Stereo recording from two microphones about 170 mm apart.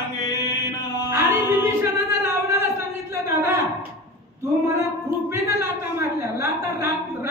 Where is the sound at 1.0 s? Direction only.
15° right (ahead or behind).